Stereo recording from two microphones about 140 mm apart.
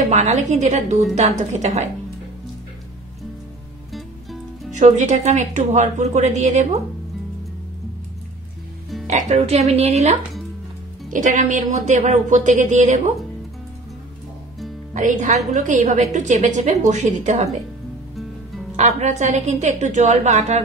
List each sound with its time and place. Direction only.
0.1 s a woman's voice: 55° right (ahead or behind)
4.6 s a woman's voice: 55° right (ahead or behind)
9.0 s speech: 55° right (ahead or behind)
11.1 s a woman's voice: 65° right (ahead or behind)
15.0 s a woman's voice: 65° right (ahead or behind)
18.8 s a woman's voice: 50° right (ahead or behind)